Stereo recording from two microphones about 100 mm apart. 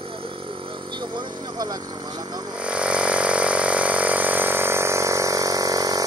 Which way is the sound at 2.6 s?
10° right (ahead or behind).